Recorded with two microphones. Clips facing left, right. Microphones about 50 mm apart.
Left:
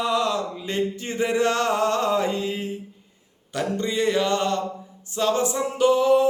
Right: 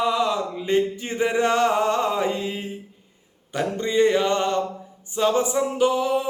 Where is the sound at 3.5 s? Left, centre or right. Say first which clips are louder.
Right 3 dB; right.